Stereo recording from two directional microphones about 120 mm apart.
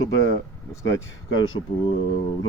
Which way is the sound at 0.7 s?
25° left (ahead or behind).